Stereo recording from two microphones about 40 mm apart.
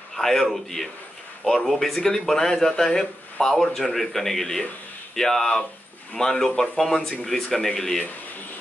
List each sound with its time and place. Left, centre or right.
0.1 s speech: centre